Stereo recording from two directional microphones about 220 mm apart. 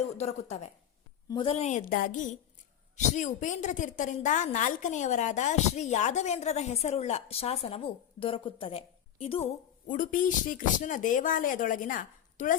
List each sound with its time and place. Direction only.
0.2 s a woman's voice: 30° left (ahead or behind)